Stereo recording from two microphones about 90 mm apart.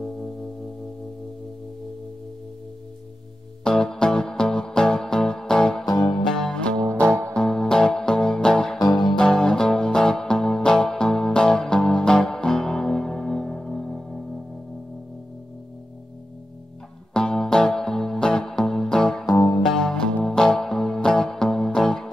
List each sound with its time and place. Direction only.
0.0 s music: 5° left (ahead or behind)
3.6 s music: 5° left (ahead or behind)
5.9 s music: 50° left (ahead or behind)
6.3 s music: 5° left (ahead or behind)
6.9 s music: 30° right (ahead or behind)
7.3 s music: 5° left (ahead or behind)
8.7 s music: 50° left (ahead or behind)
9.2 s music: 5° left (ahead or behind)
17.1 s music: 5° left (ahead or behind)
19.2 s music: 50° left (ahead or behind)
19.7 s music: 5° left (ahead or behind)